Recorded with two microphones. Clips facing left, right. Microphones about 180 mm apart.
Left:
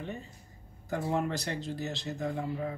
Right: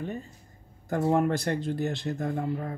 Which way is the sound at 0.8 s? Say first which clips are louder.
Right 7 dB; 50° right (ahead or behind).